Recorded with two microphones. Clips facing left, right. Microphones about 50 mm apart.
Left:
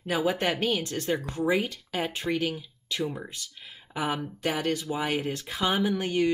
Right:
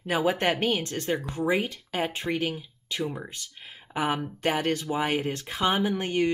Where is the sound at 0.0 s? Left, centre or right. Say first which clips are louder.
Right 2 dB; right.